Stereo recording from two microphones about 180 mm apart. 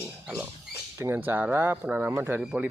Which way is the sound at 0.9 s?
10° right (ahead or behind).